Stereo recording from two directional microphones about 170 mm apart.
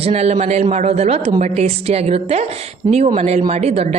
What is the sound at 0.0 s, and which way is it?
A woman's voice, 40° right (ahead or behind).